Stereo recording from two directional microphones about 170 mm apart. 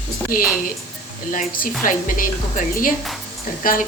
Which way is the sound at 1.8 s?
50° left (ahead or behind).